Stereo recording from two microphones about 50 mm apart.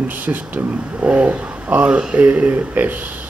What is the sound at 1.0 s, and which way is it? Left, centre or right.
A man's voice, right.